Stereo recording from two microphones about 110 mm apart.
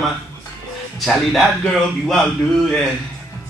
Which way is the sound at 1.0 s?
Centre (ahead or behind).